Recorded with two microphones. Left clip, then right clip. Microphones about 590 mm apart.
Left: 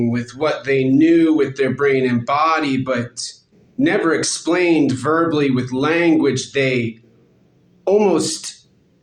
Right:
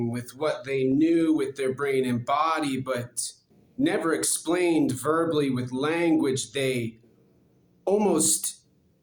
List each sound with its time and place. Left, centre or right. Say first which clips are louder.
0.1 s speech: left 8 dB; right
7.9 s speech: left 8 dB; right